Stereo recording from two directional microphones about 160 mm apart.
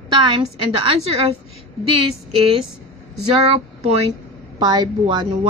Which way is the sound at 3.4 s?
40° right (ahead or behind).